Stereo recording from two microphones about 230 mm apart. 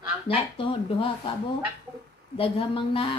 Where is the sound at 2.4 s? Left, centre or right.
Left.